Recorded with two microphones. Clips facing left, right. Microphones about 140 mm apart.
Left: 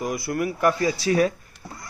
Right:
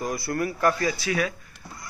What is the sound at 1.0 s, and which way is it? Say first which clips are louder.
Speech: left 10 dB; 35° left (ahead or behind).